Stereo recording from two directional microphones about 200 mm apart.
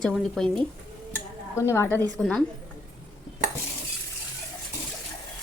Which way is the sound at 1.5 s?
15° left (ahead or behind).